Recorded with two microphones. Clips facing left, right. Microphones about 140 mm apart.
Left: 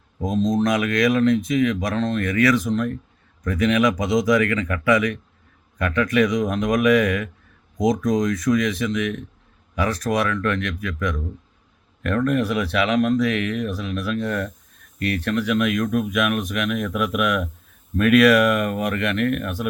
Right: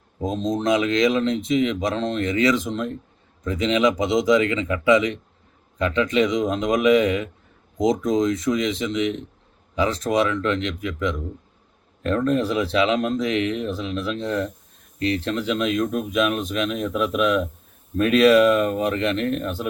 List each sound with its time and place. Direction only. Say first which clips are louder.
0.2 s speech: left 3 dB; 25° right (ahead or behind)